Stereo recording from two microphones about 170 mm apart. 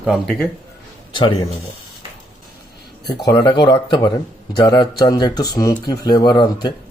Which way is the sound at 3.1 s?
25° left (ahead or behind).